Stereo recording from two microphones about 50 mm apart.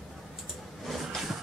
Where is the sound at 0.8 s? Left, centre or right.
Centre.